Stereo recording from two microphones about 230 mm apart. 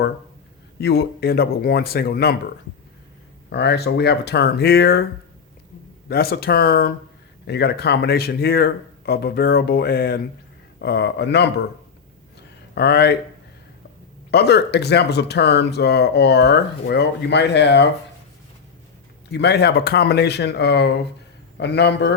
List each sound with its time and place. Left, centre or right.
0.8 s speech: left
3.5 s speech: left
6.1 s speech: left
12.7 s speech: left
14.3 s speech: left
19.3 s speech: left